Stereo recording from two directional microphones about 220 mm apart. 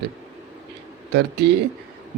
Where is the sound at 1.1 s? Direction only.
50° right (ahead or behind).